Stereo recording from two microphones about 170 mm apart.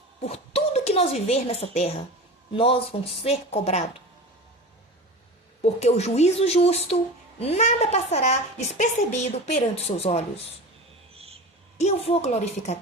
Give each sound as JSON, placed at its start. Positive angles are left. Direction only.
{"t": 0.2, "sound": "a woman's voice", "side_deg": 35}
{"t": 5.6, "sound": "a woman's voice", "side_deg": 40}
{"t": 11.1, "sound": "a sound", "side_deg": -35}
{"t": 11.8, "sound": "a woman's voice", "side_deg": 35}